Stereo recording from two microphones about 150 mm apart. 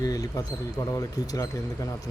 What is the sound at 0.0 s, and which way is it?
Speech, 25° left (ahead or behind).